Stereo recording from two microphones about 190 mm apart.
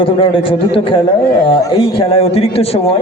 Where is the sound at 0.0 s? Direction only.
30° left (ahead or behind).